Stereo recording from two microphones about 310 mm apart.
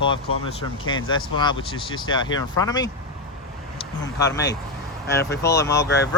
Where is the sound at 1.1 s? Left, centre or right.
Centre.